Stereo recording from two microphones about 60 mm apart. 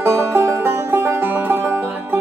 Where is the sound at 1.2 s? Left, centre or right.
Right.